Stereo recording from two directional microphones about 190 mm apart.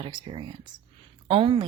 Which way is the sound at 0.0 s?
25° right (ahead or behind).